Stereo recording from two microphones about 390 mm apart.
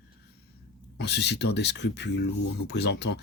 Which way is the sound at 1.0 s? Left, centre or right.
Left.